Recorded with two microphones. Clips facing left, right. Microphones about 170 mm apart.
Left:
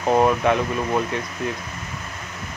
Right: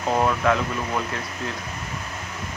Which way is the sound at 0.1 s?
20° left (ahead or behind).